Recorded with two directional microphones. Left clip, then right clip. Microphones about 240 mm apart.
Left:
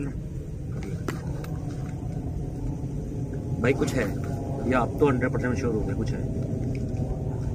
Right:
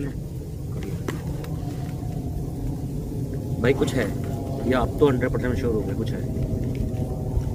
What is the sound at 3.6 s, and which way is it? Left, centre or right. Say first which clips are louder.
Speech: right 3 dB; centre.